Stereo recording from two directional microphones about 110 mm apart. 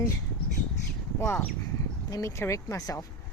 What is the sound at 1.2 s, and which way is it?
Speech, 15° left (ahead or behind).